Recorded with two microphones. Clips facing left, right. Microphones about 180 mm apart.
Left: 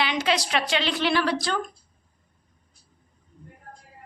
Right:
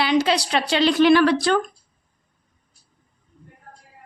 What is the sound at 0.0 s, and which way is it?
A woman's voice, 35° right (ahead or behind).